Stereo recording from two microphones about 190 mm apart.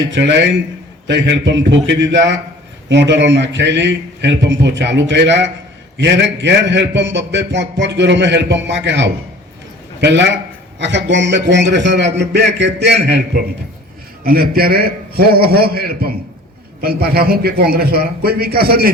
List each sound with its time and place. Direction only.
0.1 s a man's voice: 70° right (ahead or behind)
14.3 s a man's voice: 50° right (ahead or behind)